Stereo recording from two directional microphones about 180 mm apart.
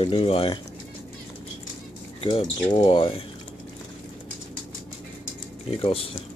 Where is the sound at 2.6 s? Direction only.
30° left (ahead or behind).